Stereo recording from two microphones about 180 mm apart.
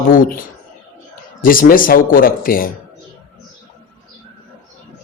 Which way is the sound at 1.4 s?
50° left (ahead or behind).